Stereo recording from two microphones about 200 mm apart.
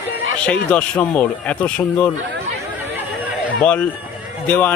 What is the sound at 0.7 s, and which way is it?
Speech, 5° left (ahead or behind).